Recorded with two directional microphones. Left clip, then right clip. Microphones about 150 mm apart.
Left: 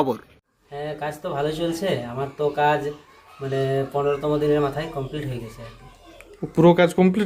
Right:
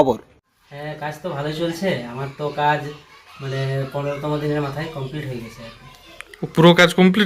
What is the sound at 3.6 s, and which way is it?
Speech, 35° left (ahead or behind).